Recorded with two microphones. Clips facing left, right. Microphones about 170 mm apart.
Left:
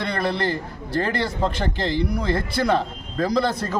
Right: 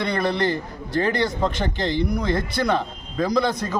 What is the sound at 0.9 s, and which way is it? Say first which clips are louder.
Speech: right 2 dB; 5° left (ahead or behind).